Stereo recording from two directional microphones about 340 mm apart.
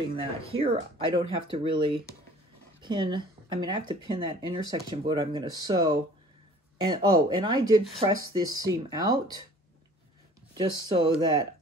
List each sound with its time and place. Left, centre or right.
0.1 s speech: centre
10.6 s speech: centre